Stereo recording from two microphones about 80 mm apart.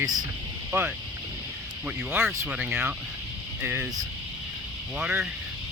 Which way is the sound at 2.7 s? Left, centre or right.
Right.